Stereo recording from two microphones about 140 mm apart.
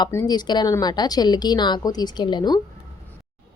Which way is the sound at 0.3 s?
30° left (ahead or behind).